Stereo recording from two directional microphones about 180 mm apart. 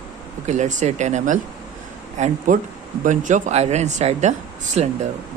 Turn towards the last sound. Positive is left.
turn(degrees=-40)  # may be behind; listen again after turning